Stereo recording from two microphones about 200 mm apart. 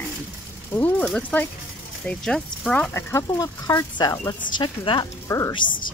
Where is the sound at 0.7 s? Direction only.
10° left (ahead or behind).